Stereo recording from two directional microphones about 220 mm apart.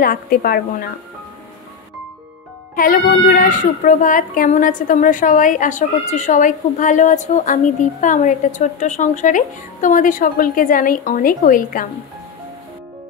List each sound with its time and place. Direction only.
0.0 s a child's voice: 40° left (ahead or behind)
2.7 s a child's voice: 40° left (ahead or behind)